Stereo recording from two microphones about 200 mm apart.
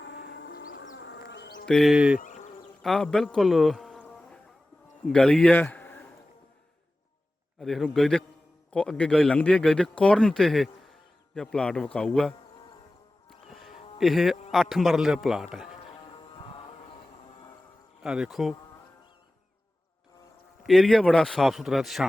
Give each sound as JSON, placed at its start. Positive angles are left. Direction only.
{"t": 0.0, "sound": "music", "side_deg": 55}
{"t": 0.9, "sound": "a sound", "side_deg": 65}
{"t": 1.6, "sound": "a man's voice", "side_deg": 0}
{"t": 2.1, "sound": "insect", "side_deg": 40}
{"t": 2.8, "sound": "a man's voice", "side_deg": 0}
{"t": 7.6, "sound": "a man's voice", "side_deg": 0}
{"t": 13.5, "sound": "music", "side_deg": 0}
{"t": 14.0, "sound": "a man's voice", "side_deg": 0}
{"t": 15.9, "sound": "music", "side_deg": 25}
{"t": 18.0, "sound": "a man's voice", "side_deg": -5}
{"t": 20.7, "sound": "a man's voice", "side_deg": 0}